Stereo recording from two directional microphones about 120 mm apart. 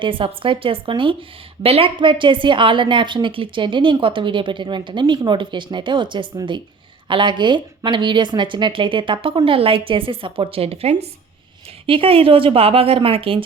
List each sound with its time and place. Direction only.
0.0 s a woman's voice: 45° right (ahead or behind)